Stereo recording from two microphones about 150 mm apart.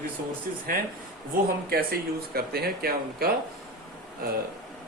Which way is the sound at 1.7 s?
90° right.